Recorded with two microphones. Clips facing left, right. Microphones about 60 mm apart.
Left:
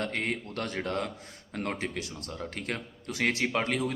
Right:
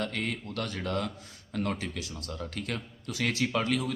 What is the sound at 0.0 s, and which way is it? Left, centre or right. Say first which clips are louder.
A man's voice: left 1 dB; left.